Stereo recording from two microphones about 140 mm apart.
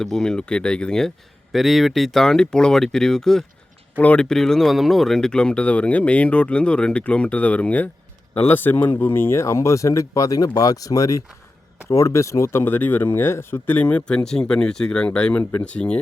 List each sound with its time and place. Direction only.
0.0 s speech: 5° left (ahead or behind)